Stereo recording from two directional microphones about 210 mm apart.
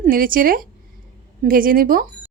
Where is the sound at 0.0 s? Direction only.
40° right (ahead or behind).